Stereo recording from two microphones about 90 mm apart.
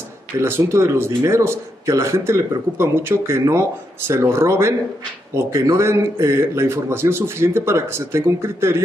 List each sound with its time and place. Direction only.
0.4 s a man's voice: 30° right (ahead or behind)